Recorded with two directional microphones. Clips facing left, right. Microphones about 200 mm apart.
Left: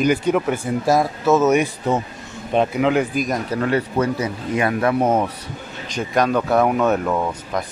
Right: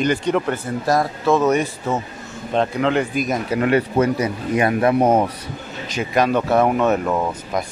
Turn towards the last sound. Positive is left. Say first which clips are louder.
# right 1 dB
turn(degrees=-10)  # may be behind; listen again after turning